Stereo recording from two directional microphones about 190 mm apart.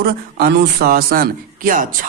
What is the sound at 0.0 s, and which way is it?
A man's voice, 55° right (ahead or behind).